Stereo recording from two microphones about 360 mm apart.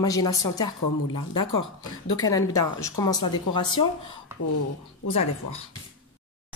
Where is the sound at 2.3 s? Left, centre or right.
Centre.